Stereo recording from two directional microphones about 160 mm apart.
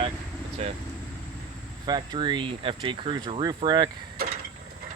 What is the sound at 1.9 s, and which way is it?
Speech, 25° right (ahead or behind).